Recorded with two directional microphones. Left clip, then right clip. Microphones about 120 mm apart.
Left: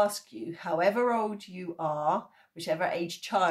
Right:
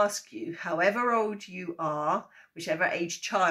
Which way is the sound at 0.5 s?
20° left (ahead or behind).